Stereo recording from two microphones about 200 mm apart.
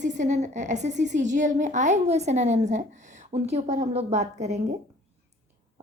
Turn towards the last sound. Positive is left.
turn(degrees=-35)  # may be behind; listen again after turning